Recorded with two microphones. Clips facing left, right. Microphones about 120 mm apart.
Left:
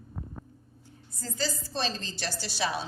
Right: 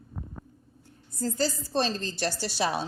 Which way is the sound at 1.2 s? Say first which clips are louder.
Right 6 dB; 50° right (ahead or behind).